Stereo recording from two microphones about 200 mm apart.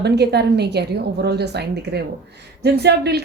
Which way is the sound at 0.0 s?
55° right (ahead or behind).